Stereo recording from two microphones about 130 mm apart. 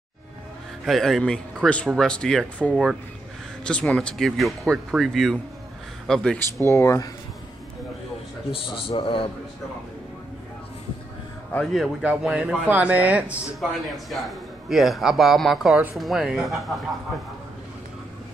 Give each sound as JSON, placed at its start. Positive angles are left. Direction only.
{"t": 0.8, "sound": "a man's voice", "side_deg": 0}
{"t": 6.7, "sound": "speech", "side_deg": 25}
{"t": 8.5, "sound": "a man's voice", "side_deg": 45}
{"t": 11.5, "sound": "a man's voice", "side_deg": 0}
{"t": 13.6, "sound": "a man's voice", "side_deg": 0}